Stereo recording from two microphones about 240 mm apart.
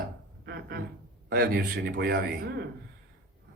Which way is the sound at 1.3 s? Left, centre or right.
Right.